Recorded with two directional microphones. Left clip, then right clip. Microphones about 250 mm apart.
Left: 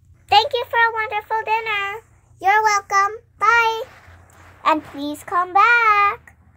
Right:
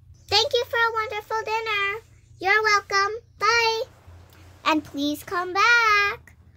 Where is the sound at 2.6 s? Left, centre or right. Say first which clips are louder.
Left 4 dB; centre.